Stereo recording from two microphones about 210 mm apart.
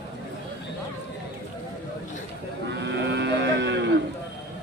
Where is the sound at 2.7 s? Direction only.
55° right (ahead or behind).